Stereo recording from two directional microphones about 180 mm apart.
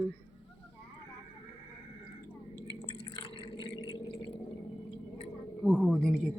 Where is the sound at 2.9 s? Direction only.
20° left (ahead or behind).